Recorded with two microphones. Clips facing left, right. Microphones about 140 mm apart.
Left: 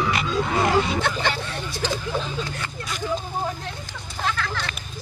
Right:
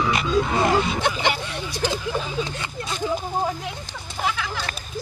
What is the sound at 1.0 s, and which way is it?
Speech, 15° right (ahead or behind).